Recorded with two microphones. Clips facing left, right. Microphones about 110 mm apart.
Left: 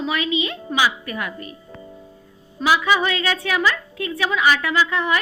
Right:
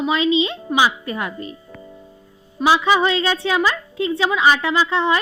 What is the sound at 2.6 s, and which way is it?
A woman's voice, 25° right (ahead or behind).